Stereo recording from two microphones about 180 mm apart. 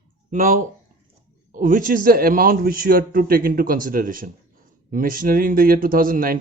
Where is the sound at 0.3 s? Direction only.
50° right (ahead or behind).